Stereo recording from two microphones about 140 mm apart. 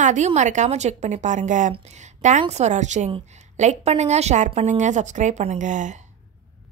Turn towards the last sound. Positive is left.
turn(degrees=-60)  # may be behind; listen again after turning